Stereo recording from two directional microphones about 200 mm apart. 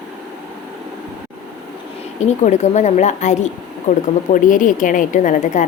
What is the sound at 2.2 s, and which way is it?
A woman's voice, 35° left (ahead or behind).